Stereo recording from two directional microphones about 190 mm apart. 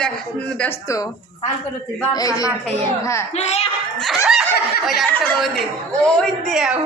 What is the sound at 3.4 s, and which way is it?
Speech, 35° left (ahead or behind).